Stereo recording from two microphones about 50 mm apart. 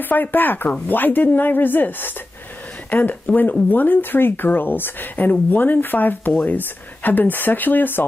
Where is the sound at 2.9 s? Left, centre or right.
Left.